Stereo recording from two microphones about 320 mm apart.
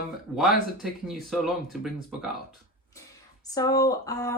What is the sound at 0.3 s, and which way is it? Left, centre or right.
Speech, centre.